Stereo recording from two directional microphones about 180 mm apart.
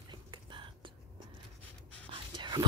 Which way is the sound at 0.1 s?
25° right (ahead or behind).